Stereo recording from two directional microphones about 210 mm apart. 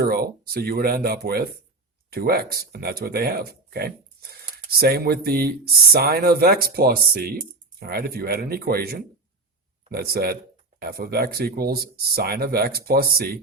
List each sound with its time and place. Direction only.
0.0 s speech: 45° right (ahead or behind)